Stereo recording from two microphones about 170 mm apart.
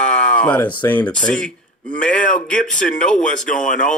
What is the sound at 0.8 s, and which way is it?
Speech, 10° left (ahead or behind).